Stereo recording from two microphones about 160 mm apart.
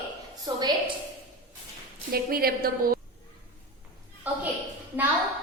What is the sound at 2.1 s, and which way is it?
Speech, 70° right (ahead or behind).